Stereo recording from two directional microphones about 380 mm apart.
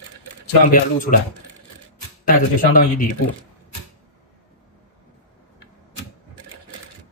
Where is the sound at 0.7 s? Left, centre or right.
Left.